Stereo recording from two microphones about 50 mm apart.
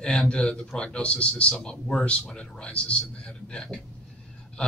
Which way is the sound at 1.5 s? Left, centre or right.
Centre.